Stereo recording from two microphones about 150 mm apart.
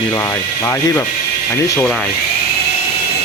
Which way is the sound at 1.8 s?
5° left (ahead or behind).